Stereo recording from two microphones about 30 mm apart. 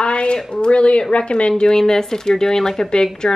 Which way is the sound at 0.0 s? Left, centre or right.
Left.